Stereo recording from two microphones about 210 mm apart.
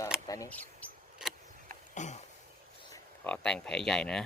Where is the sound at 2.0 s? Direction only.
35° left (ahead or behind).